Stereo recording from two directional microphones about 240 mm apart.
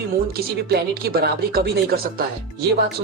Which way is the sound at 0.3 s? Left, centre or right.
Right.